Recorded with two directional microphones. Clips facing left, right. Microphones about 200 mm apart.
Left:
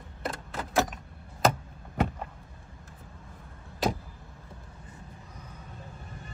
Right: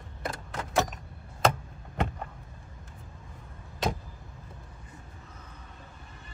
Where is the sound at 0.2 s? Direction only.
Centre (ahead or behind).